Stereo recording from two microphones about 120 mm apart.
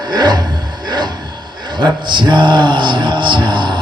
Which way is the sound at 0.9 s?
40° right (ahead or behind).